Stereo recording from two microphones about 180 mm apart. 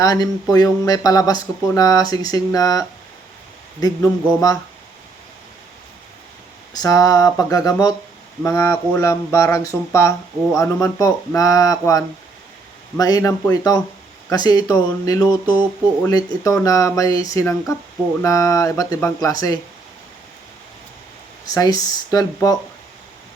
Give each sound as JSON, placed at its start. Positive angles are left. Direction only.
{"t": 0.0, "sound": "speech", "side_deg": 20}
{"t": 6.7, "sound": "speech", "side_deg": 20}
{"t": 21.4, "sound": "speech", "side_deg": 20}